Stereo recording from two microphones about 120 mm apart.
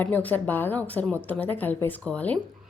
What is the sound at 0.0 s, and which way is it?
A woman's voice, 15° left (ahead or behind).